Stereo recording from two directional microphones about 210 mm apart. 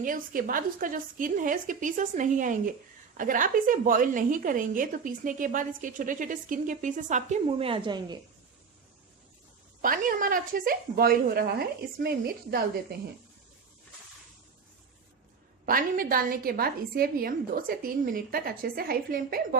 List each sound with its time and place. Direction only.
0.0 s a woman's voice: 40° right (ahead or behind); by 8.2 s 20° right (ahead or behind)
9.8 s a woman's voice: 40° right (ahead or behind)
15.6 s a woman's voice: 45° right (ahead or behind)